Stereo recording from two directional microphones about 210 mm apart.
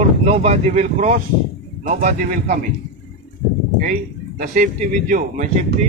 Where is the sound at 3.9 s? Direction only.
45° right (ahead or behind).